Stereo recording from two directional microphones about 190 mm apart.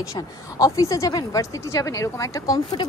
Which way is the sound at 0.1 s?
20° left (ahead or behind).